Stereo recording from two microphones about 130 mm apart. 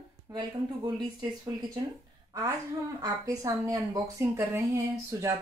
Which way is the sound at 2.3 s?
25° right (ahead or behind).